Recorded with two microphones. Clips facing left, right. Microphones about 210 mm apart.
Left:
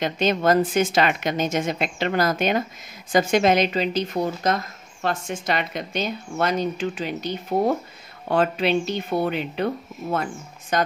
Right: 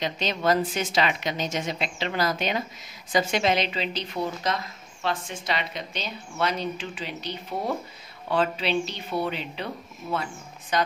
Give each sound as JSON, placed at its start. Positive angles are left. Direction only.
{"t": 0.0, "sound": "a woman's voice", "side_deg": 50}